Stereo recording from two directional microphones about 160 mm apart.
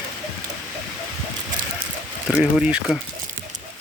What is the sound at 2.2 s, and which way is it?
Speech, 5° right (ahead or behind).